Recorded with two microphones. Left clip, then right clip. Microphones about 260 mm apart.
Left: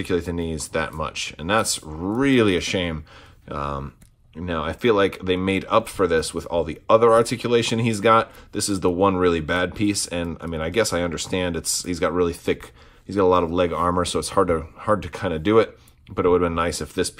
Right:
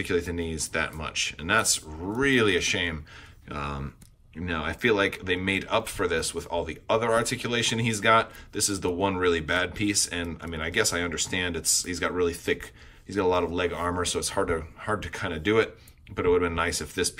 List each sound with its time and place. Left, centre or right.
0.0 s speech: centre